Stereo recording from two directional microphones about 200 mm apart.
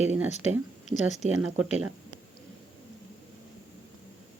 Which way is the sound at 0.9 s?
35° left (ahead or behind).